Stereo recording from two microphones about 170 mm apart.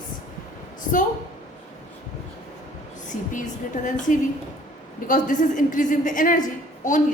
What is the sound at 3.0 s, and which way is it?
A woman's voice, 45° left (ahead or behind).